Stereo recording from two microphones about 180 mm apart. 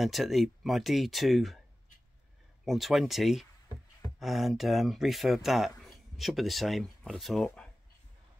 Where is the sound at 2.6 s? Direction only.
Centre (ahead or behind).